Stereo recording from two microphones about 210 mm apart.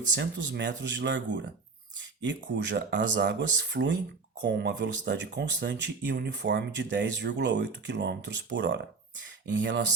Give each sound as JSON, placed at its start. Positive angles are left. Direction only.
{"t": 0.2, "sound": "speech", "side_deg": -55}